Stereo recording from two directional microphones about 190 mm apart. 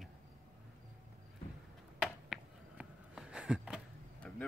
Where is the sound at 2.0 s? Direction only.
5° right (ahead or behind).